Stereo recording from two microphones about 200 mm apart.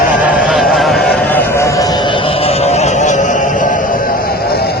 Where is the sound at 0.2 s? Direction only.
5° right (ahead or behind).